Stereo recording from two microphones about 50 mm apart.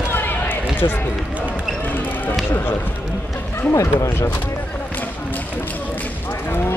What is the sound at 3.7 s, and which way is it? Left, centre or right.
Speech, left.